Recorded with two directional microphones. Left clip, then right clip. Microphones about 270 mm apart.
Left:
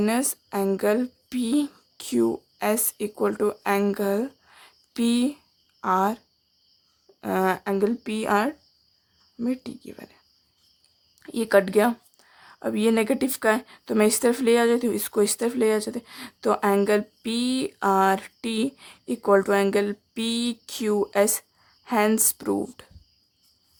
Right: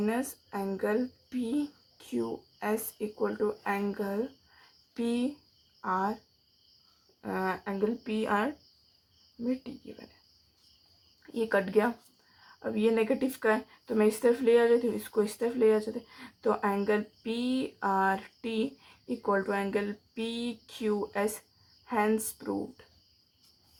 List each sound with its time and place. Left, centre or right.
0.0 s speech: left
7.2 s speech: left
11.2 s speech: left